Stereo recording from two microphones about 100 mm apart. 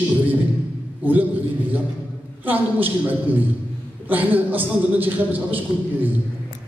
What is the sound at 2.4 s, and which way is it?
A man's voice, 20° right (ahead or behind).